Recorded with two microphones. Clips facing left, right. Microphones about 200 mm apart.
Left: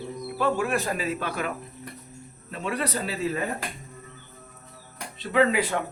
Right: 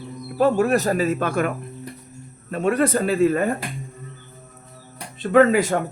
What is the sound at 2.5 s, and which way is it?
Speech, 50° right (ahead or behind).